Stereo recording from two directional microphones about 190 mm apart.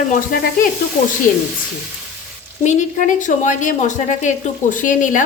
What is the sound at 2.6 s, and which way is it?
A woman's voice, 40° left (ahead or behind).